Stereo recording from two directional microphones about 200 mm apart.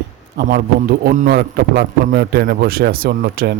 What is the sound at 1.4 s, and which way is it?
Speech, 55° right (ahead or behind).